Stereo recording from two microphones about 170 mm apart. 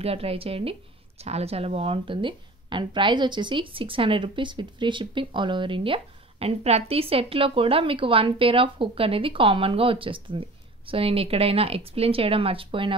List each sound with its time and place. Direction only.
0.0 s a woman's voice: 35° right (ahead or behind)